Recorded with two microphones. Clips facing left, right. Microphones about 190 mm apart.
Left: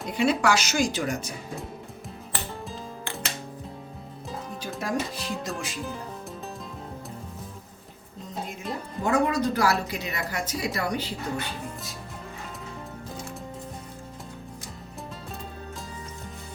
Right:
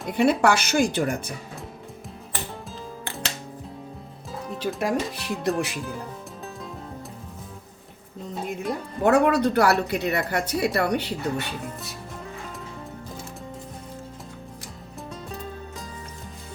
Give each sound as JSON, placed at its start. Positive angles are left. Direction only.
{"t": 0.1, "sound": "speech", "side_deg": -55}
{"t": 4.6, "sound": "speech", "side_deg": -65}
{"t": 9.0, "sound": "speech", "side_deg": -65}